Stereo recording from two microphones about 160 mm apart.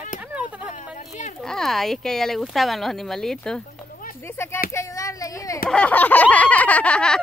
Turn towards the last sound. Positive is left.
turn(degrees=5)  # may be behind; listen again after turning